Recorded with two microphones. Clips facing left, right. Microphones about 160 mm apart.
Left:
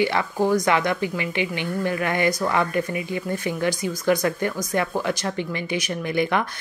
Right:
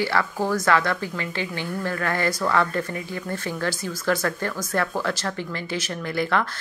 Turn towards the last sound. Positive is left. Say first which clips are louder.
# left 2 dB
turn(degrees=15)  # may be behind; listen again after turning